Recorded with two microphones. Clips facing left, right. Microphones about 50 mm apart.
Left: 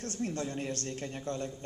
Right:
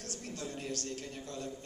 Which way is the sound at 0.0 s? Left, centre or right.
Left.